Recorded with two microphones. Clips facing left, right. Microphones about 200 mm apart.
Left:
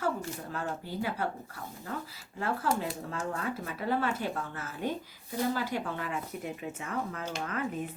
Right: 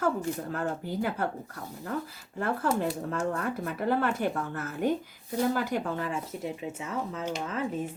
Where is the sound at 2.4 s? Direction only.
55° right (ahead or behind).